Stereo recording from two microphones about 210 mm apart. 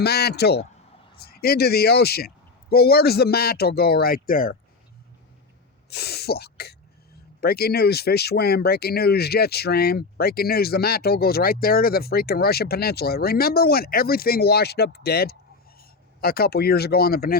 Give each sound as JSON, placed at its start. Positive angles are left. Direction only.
{"t": 0.0, "sound": "speech", "side_deg": 50}
{"t": 5.9, "sound": "speech", "side_deg": 50}